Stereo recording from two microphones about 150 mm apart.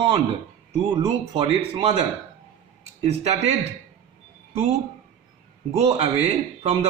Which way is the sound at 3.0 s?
45° right (ahead or behind).